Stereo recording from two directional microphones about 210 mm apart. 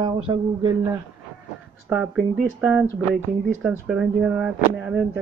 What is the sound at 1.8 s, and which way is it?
Speech, 5° right (ahead or behind).